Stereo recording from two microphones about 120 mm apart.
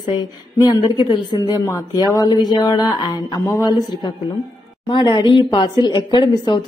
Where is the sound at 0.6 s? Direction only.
40° left (ahead or behind).